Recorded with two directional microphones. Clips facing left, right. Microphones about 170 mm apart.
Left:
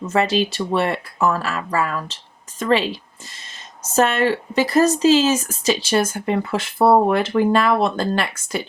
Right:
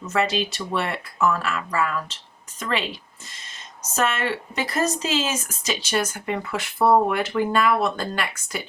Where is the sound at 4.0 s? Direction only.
35° left (ahead or behind).